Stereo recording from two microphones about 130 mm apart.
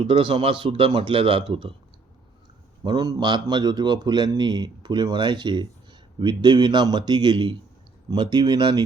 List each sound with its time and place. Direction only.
0.1 s speech: 45° right (ahead or behind)
2.8 s a man's voice: 30° right (ahead or behind)